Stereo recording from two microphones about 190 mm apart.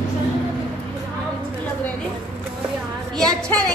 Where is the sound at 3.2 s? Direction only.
5° left (ahead or behind).